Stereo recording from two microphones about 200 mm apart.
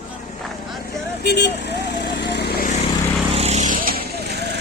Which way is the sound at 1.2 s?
55° left (ahead or behind).